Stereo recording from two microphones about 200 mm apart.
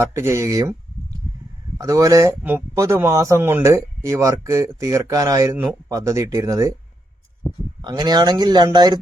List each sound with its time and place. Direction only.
0.0 s speech: 10° right (ahead or behind)
1.8 s speech: 15° right (ahead or behind)
7.8 s speech: 20° right (ahead or behind)